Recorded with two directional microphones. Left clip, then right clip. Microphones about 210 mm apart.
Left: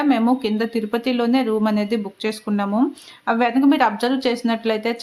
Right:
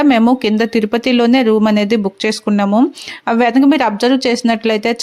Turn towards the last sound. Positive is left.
turn(degrees=-35)  # may be behind; listen again after turning